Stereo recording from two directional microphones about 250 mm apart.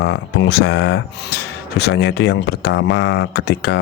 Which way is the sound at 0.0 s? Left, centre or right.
Left.